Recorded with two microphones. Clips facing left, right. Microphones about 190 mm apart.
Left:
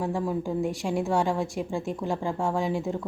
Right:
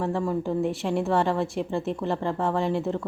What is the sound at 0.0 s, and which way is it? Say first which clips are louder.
A woman's voice: right 2 dB; 5° left (ahead or behind).